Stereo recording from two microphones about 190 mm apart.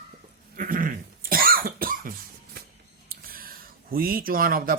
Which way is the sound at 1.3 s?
50° right (ahead or behind).